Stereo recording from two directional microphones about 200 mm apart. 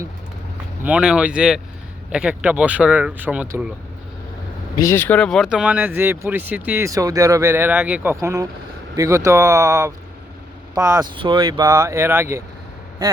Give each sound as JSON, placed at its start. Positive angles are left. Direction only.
{"t": 0.9, "sound": "speech", "side_deg": -5}
{"t": 4.8, "sound": "speech", "side_deg": 10}